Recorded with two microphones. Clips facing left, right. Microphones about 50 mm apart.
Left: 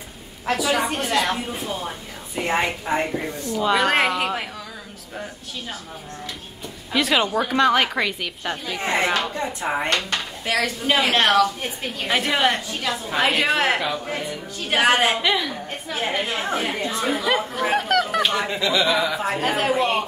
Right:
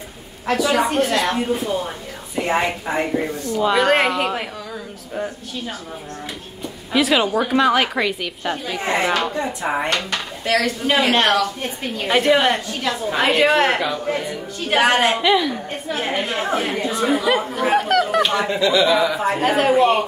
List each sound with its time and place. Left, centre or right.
0.5 s speech: centre
6.9 s speech: centre
9.6 s speech: centre
9.9 s speech: centre